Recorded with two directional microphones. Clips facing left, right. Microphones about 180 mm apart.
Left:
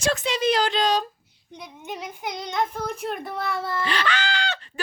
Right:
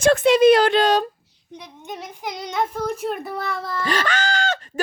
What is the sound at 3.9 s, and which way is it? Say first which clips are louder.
Speech: right 7 dB; 45° right (ahead or behind).